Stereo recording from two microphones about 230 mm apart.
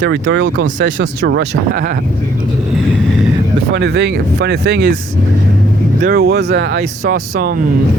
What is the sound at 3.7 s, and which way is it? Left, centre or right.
Speech, right.